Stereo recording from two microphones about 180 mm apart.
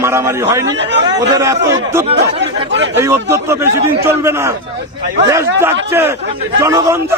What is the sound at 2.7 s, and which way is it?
Speech, 85° right.